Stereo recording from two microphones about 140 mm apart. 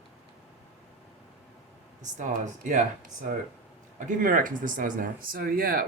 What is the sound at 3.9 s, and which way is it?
Speech, 75° right (ahead or behind).